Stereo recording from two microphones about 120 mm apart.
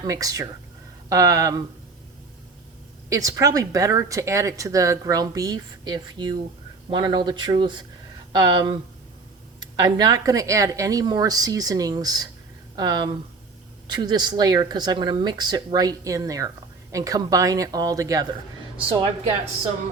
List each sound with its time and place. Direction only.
0.0 s speech: 30° right (ahead or behind)
3.1 s a woman's voice: 30° right (ahead or behind)
18.8 s speech: 45° right (ahead or behind)